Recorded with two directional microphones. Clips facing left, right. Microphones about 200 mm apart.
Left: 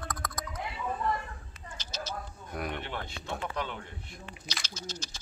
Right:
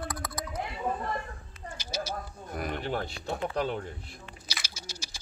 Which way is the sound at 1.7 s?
10° right (ahead or behind).